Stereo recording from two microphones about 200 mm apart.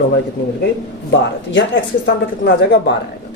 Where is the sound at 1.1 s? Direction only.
70° left (ahead or behind).